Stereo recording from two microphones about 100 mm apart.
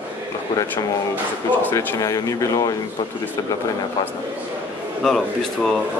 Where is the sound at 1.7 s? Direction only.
30° left (ahead or behind).